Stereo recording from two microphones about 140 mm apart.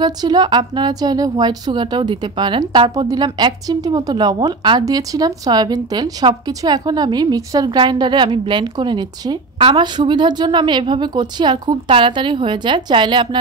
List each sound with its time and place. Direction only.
0.0 s a woman's voice: 30° right (ahead or behind)